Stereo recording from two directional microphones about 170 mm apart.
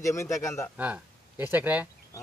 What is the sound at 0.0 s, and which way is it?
Speech, 15° left (ahead or behind).